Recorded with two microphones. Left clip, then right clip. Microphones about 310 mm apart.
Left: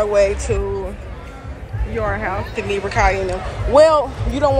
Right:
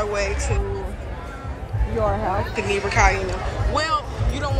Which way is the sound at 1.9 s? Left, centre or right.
Centre.